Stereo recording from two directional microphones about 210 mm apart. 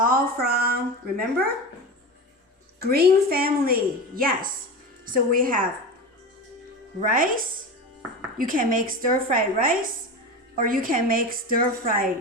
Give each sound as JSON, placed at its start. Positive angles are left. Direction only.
{"t": 0.0, "sound": "a woman's voice", "side_deg": -45}
{"t": 2.8, "sound": "a woman's voice", "side_deg": -45}
{"t": 7.0, "sound": "a woman's voice", "side_deg": -40}